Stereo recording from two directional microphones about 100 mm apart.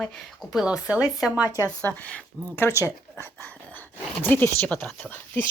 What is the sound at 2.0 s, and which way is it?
Speech, 15° left (ahead or behind).